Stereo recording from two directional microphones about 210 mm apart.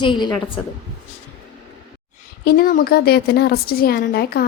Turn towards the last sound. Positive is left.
turn(degrees=45)  # may be behind; listen again after turning